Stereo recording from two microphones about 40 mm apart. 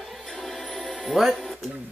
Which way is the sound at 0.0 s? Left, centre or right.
Centre.